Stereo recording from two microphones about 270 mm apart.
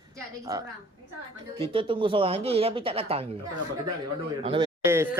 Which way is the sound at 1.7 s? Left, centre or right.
Centre.